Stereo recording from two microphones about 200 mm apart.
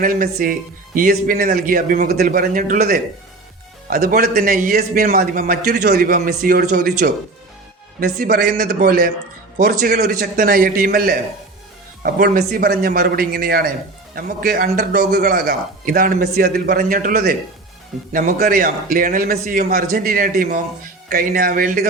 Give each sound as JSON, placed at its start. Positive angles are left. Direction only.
{"t": 0.0, "sound": "a man's voice", "side_deg": -45}